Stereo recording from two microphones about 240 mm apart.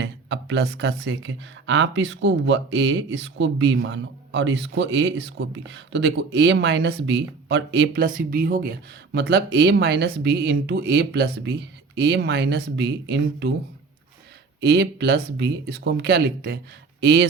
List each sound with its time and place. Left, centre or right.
0.0 s speech: right
14.6 s speech: right